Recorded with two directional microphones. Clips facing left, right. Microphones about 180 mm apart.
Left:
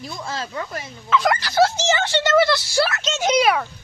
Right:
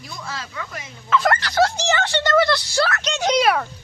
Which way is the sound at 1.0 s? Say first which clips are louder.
Even; centre (ahead or behind).